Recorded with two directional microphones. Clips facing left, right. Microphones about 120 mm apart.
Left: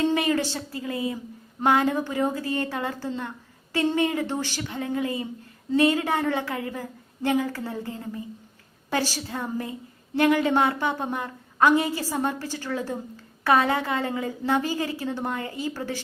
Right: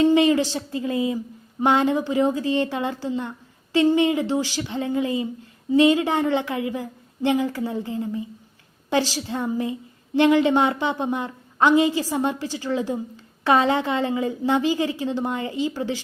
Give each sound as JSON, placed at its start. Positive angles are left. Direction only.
{"t": 0.0, "sound": "a sound", "side_deg": -20}
{"t": 0.5, "sound": "speech", "side_deg": -20}
{"t": 9.3, "sound": "a woman's voice", "side_deg": -20}